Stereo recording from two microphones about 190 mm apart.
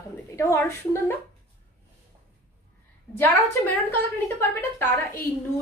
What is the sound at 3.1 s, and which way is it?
A woman's voice, 10° left (ahead or behind).